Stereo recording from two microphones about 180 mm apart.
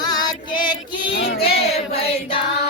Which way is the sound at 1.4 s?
35° left (ahead or behind).